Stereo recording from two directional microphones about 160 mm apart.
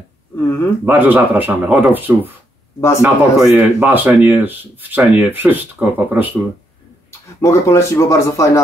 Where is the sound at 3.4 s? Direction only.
5° right (ahead or behind).